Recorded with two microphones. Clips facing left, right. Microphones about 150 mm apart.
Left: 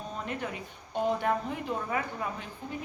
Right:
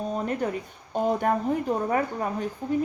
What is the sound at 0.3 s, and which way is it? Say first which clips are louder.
A woman's voice: right 8 dB; 40° right (ahead or behind).